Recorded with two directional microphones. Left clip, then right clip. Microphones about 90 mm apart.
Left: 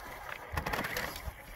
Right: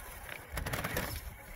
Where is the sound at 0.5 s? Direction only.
45° right (ahead or behind).